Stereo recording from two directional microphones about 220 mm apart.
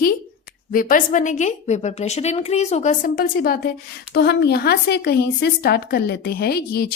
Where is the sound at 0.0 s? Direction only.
40° left (ahead or behind).